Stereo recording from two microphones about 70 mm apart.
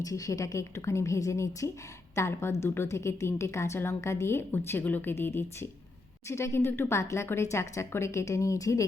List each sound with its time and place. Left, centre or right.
0.0 s a woman's voice: left